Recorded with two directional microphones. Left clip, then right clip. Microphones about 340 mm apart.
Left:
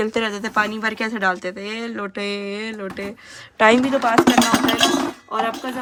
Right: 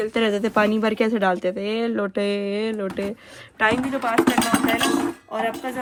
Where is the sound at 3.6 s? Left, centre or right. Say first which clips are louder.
Left 6 dB; centre.